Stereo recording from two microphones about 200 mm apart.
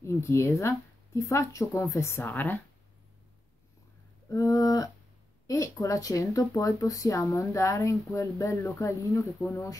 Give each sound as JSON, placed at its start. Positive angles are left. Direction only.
{"t": 0.0, "sound": "speech", "side_deg": 15}
{"t": 4.3, "sound": "speech", "side_deg": 15}